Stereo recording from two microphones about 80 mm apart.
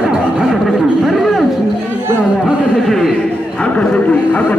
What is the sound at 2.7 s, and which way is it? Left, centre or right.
Speech, centre.